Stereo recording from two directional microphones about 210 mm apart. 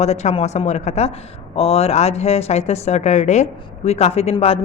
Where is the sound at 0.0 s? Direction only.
30° left (ahead or behind).